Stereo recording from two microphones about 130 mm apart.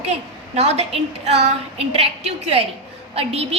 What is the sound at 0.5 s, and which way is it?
A woman's voice, 55° right (ahead or behind).